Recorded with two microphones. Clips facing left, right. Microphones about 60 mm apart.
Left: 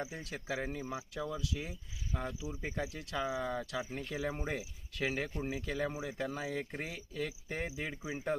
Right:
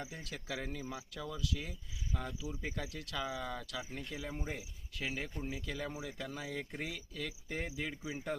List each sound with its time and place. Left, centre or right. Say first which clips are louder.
0.0 s speech: left 4 dB; left